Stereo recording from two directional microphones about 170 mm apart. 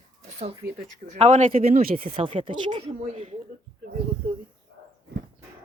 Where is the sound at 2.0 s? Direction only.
35° right (ahead or behind).